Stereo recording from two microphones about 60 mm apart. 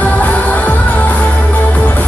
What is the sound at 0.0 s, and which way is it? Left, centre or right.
Music, left.